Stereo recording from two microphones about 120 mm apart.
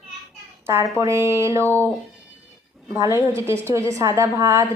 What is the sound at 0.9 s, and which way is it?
Speech, 25° right (ahead or behind).